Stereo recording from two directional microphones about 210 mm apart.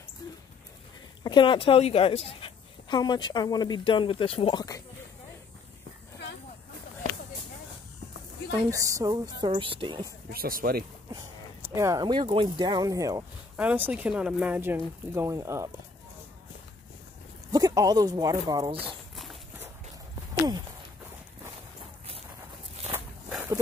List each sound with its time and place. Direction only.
1.2 s a woman's voice: 20° left (ahead or behind)
8.5 s speech: 15° right (ahead or behind)
10.3 s speech: 45° right (ahead or behind)
11.1 s speech: 15° right (ahead or behind)
17.5 s speech: 15° right (ahead or behind)
19.1 s horse: centre (ahead or behind)